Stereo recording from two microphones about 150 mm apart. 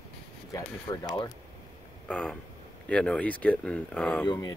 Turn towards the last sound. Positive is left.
turn(degrees=30)  # may be behind; listen again after turning